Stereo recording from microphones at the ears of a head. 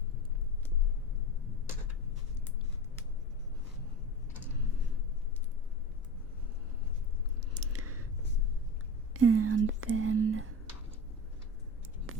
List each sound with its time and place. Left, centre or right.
9.1 s whispering: right